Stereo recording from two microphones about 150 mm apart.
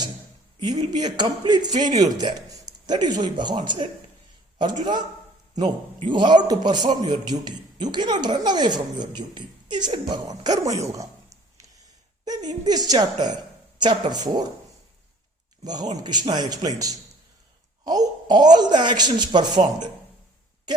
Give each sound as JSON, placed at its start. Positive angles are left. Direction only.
{"t": 0.6, "sound": "a man's voice", "side_deg": -30}
{"t": 15.6, "sound": "speech", "side_deg": -25}